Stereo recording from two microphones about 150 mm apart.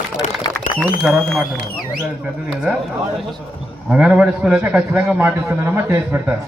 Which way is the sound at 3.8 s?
10° right (ahead or behind).